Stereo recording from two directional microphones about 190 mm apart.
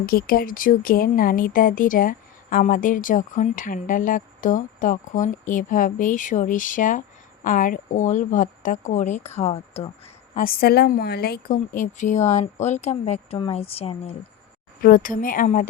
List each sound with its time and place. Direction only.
0.0 s a woman's voice: 50° left (ahead or behind); by 9.9 s 30° left (ahead or behind)
10.3 s a woman's voice: 50° left (ahead or behind); by 14.2 s 30° left (ahead or behind)
14.8 s speech: 45° left (ahead or behind)